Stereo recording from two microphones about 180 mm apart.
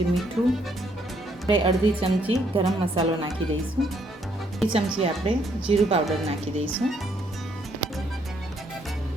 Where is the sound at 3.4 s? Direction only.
90° right.